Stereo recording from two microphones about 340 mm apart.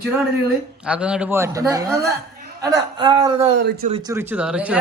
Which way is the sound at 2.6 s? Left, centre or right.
Centre.